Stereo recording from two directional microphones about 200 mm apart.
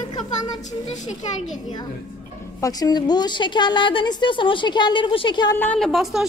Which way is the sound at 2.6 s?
20° left (ahead or behind).